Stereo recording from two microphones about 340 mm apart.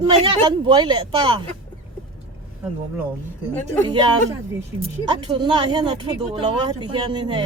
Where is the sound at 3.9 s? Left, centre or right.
Centre.